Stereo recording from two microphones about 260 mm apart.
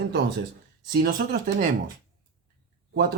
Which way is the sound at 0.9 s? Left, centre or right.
Right.